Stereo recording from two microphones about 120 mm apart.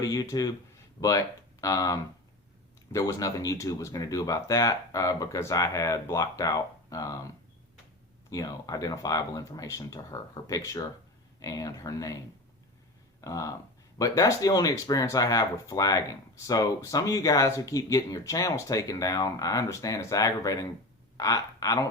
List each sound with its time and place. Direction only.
0.0 s speech: 30° left (ahead or behind)
3.1 s speech: 30° left (ahead or behind)
8.3 s speech: 30° left (ahead or behind)
13.2 s speech: 30° left (ahead or behind)